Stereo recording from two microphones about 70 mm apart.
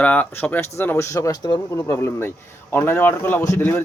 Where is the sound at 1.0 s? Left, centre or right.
Left.